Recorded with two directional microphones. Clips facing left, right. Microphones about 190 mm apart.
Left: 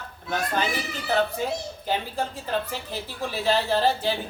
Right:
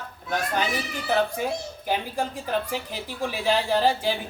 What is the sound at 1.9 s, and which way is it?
A woman's voice, 15° right (ahead or behind).